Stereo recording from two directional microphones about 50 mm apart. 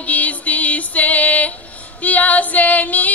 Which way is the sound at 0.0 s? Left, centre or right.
Left.